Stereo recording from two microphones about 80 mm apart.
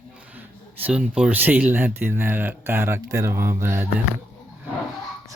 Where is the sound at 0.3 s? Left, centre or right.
Right.